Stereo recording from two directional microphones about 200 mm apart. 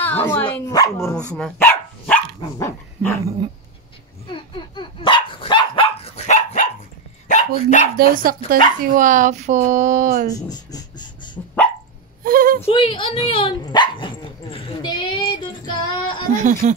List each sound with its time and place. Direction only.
0.3 s speech: 15° left (ahead or behind)
1.1 s dog: 5° left (ahead or behind)
4.3 s dog: 25° left (ahead or behind)
7.2 s speech: 40° left (ahead or behind)
8.0 s speech: 45° right (ahead or behind)
10.5 s a sound: 20° left (ahead or behind)
11.4 s dog: 10° left (ahead or behind)
12.2 s a sound: 45° right (ahead or behind)
12.5 s speech: 30° left (ahead or behind)
15.4 s female singing: 25° left (ahead or behind)
16.3 s speech: 40° right (ahead or behind)